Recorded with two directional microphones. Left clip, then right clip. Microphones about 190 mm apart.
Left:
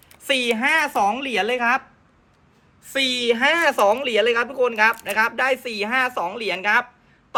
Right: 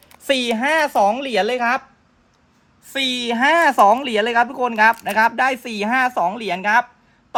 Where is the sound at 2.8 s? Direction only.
60° right (ahead or behind).